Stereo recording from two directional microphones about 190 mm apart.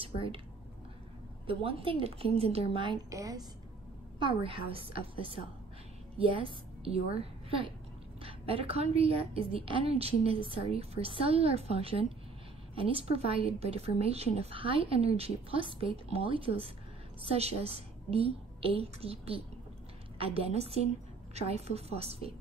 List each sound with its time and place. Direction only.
1.5 s a woman's voice: 30° right (ahead or behind)